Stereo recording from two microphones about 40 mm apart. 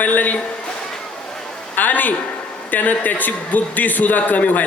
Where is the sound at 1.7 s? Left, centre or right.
Left.